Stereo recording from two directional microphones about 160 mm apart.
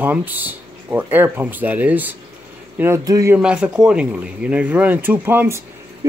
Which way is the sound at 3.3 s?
5° right (ahead or behind).